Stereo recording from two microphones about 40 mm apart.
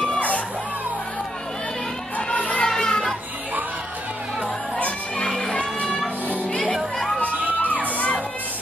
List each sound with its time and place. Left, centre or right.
2.1 s music: left
2.6 s music: centre
5.1 s music: centre